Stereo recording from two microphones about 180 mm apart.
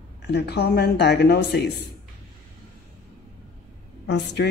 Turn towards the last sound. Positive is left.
turn(degrees=75)  # may be behind; listen again after turning